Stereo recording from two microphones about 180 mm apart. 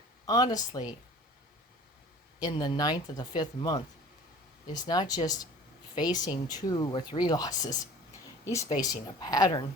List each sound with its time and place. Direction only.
0.3 s speech: 20° left (ahead or behind)
2.4 s speech: 20° left (ahead or behind)